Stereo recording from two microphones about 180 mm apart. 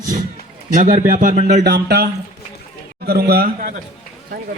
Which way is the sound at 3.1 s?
60° right (ahead or behind).